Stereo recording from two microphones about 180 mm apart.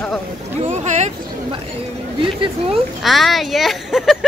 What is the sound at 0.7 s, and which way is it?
Speech, 40° right (ahead or behind).